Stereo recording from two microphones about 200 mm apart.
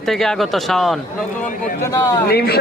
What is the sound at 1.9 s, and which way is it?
Speech, 15° left (ahead or behind).